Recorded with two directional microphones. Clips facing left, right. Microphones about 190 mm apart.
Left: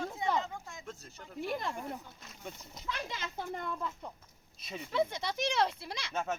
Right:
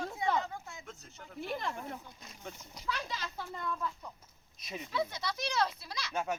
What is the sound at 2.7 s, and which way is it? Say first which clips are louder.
Speech: right 2 dB; 25° left (ahead or behind).